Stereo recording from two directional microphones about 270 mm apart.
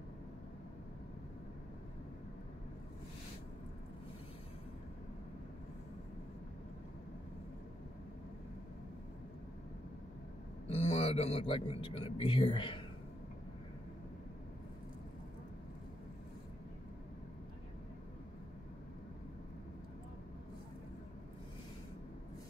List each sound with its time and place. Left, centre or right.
10.7 s a man's voice: left